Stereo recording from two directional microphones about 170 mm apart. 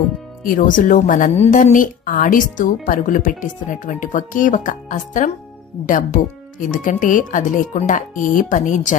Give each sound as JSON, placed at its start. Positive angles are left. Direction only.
{"t": 0.4, "sound": "speech", "side_deg": 55}
{"t": 6.6, "sound": "speech", "side_deg": 50}